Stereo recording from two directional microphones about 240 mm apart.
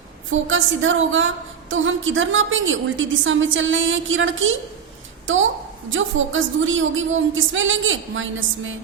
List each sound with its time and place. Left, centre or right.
0.3 s a woman's voice: right